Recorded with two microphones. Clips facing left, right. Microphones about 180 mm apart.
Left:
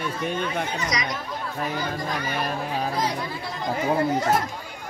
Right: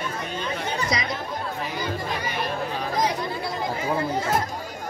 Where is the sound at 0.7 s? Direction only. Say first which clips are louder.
Right 1 dB; 30° right (ahead or behind).